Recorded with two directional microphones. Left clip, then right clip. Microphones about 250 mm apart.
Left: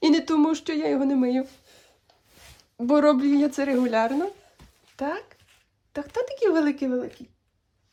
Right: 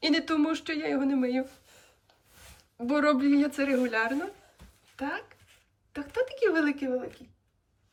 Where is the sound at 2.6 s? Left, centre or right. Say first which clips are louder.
Left 7 dB; left.